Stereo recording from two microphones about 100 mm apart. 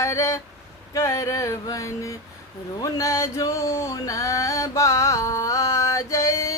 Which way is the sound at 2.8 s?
35° left (ahead or behind).